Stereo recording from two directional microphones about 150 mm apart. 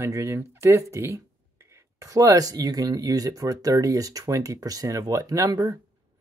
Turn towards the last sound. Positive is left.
turn(degrees=-25)  # may be behind; listen again after turning